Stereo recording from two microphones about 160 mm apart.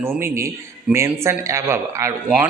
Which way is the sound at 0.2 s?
15° right (ahead or behind).